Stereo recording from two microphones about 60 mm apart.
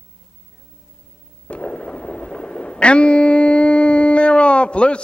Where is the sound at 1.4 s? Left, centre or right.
Centre.